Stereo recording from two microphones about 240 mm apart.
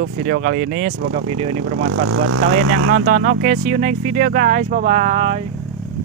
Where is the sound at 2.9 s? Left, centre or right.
Right.